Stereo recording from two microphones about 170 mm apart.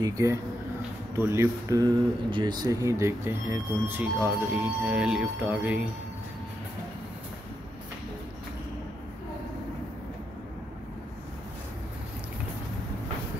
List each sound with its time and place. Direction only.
0.0 s speech: 20° right (ahead or behind)